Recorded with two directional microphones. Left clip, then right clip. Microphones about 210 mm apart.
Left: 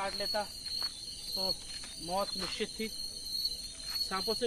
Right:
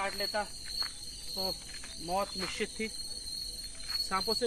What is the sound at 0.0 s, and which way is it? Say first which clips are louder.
Speech: right 1 dB; 30° right (ahead or behind).